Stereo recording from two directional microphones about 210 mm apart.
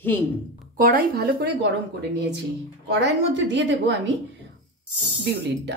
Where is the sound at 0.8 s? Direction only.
45° right (ahead or behind).